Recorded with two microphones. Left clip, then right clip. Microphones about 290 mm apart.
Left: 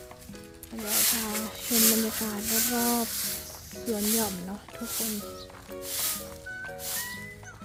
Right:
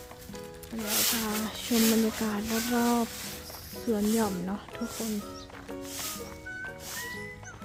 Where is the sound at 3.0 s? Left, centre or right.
Left.